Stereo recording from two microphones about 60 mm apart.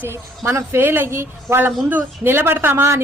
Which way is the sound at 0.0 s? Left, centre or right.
Right.